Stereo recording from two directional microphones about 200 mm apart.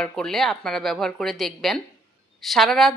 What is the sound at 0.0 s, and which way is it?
A woman's voice, centre (ahead or behind).